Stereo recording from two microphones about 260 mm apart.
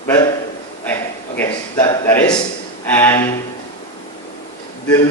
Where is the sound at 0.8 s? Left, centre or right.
Centre.